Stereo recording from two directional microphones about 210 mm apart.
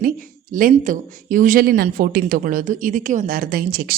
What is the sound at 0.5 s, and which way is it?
Speech, 40° right (ahead or behind).